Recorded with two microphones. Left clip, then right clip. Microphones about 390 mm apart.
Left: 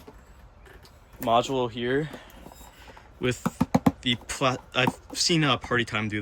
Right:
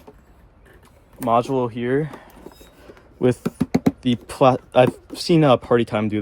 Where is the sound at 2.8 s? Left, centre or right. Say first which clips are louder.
Right 10 dB; centre.